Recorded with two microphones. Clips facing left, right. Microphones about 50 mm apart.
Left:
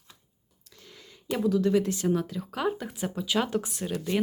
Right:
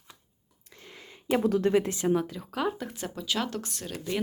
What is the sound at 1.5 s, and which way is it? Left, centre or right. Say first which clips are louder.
Speech: left 2 dB; right.